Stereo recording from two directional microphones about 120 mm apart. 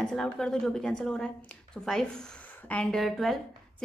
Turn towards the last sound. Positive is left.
turn(degrees=0)  # may be behind; listen again after turning